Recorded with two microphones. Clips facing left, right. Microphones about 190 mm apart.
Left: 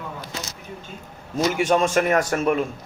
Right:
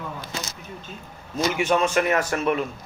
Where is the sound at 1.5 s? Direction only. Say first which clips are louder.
Left 2 dB; 45° left (ahead or behind).